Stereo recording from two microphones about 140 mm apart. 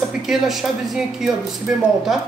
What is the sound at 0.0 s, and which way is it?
Speech, 5° right (ahead or behind).